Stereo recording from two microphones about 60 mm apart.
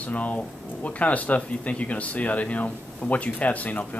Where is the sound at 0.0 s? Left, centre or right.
Left.